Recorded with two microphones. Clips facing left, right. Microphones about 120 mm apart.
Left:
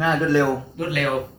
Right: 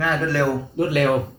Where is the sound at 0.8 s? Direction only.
30° right (ahead or behind).